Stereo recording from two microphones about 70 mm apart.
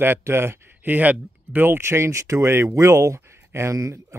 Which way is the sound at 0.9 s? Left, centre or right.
Right.